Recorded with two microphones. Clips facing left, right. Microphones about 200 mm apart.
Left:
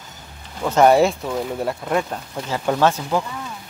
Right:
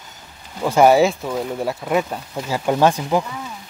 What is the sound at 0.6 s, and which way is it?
Speech, 10° right (ahead or behind).